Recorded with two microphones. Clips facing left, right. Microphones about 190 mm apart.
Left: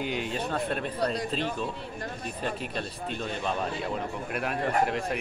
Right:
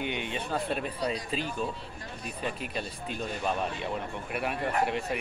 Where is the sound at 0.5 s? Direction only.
5° right (ahead or behind).